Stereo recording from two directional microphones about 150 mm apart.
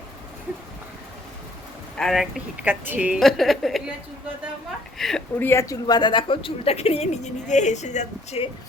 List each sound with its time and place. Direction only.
2.0 s a woman's voice: centre (ahead or behind)
4.9 s a woman's voice: centre (ahead or behind)
5.4 s speech: 15° left (ahead or behind); by 8.4 s 50° left (ahead or behind)